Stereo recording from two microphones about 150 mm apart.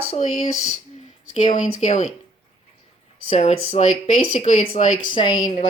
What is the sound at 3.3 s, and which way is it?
Speech, 45° left (ahead or behind).